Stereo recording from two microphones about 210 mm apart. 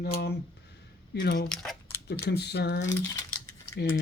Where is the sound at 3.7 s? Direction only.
50° left (ahead or behind).